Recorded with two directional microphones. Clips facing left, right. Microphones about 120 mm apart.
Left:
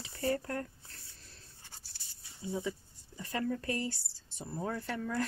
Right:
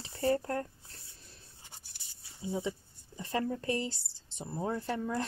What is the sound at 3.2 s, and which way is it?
Speech, 30° right (ahead or behind).